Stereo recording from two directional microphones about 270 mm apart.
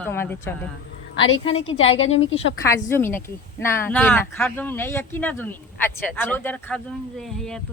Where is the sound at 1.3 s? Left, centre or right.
Left.